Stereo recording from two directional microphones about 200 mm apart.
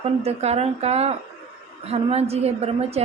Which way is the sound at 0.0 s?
30° right (ahead or behind).